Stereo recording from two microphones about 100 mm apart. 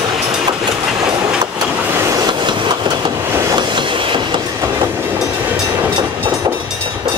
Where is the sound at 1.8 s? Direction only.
25° right (ahead or behind).